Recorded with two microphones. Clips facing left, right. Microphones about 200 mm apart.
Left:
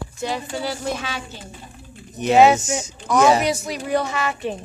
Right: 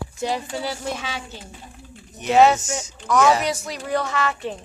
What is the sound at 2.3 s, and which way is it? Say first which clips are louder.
Speech: left 2 dB; 10° left (ahead or behind).